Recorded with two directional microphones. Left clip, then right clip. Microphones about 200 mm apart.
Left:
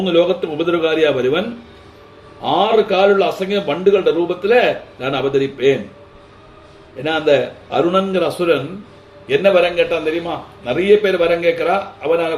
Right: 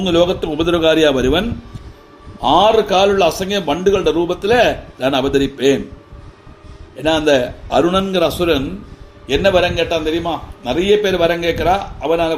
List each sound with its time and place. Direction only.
0.0 s a man's voice: 45° right (ahead or behind)
7.0 s a man's voice: 50° right (ahead or behind)